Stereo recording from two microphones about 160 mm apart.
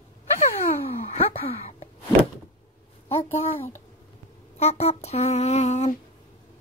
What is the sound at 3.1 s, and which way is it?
Speech, 40° left (ahead or behind).